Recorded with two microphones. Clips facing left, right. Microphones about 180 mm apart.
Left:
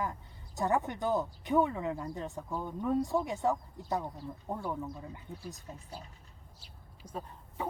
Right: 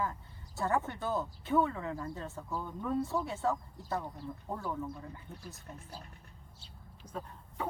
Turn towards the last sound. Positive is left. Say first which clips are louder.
# left 1 dB
turn(degrees=10)  # may be behind; listen again after turning